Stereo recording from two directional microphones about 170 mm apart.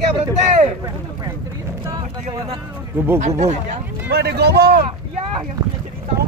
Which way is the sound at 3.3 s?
40° right (ahead or behind).